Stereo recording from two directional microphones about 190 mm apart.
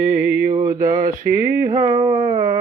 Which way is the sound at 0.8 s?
45° right (ahead or behind).